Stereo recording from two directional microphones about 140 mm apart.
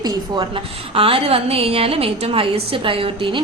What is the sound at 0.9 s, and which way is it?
A woman's voice, 40° right (ahead or behind).